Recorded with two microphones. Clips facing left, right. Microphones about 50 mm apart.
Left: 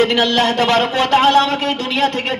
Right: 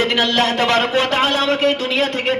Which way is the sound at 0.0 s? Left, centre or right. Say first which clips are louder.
Left 2 dB; centre.